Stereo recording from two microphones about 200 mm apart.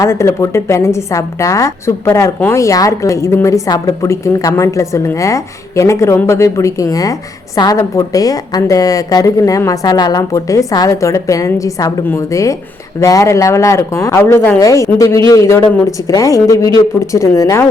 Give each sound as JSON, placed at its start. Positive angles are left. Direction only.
{"t": 0.0, "sound": "a woman's voice", "side_deg": 15}